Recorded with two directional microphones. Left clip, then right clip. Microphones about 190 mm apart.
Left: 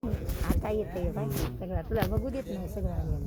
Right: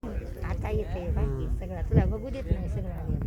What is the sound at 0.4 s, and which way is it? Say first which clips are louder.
Speech: left 2 dB; 55° left (ahead or behind).